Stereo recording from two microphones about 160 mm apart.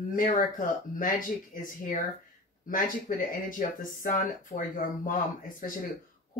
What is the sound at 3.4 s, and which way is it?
Speech, 55° left (ahead or behind).